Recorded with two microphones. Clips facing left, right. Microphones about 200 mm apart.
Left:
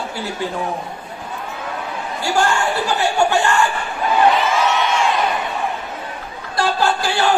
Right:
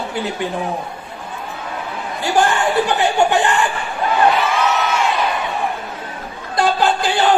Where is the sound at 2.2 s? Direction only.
20° right (ahead or behind).